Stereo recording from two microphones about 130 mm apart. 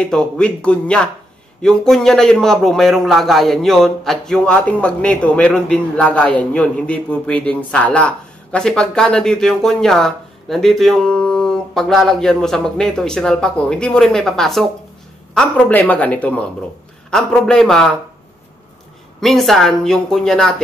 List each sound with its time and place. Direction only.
0.0 s a man's voice: 5° left (ahead or behind)
19.2 s a man's voice: centre (ahead or behind)